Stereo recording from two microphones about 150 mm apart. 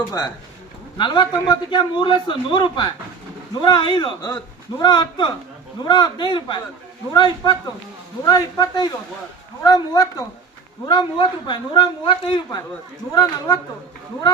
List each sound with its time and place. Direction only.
0.9 s a man's voice: 30° left (ahead or behind)